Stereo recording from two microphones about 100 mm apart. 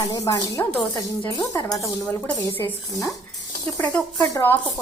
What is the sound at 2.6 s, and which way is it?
Speech, 25° left (ahead or behind).